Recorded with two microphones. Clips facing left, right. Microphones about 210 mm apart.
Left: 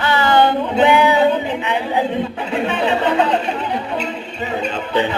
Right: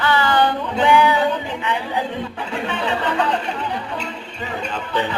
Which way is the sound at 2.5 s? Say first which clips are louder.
Left 5 dB; 20° left (ahead or behind).